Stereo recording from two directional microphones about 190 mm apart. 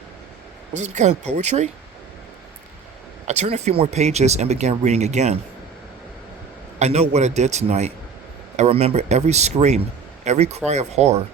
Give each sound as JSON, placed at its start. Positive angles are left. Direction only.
{"t": 0.7, "sound": "speech", "side_deg": -40}
{"t": 3.2, "sound": "speech", "side_deg": -35}
{"t": 6.7, "sound": "speech", "side_deg": -35}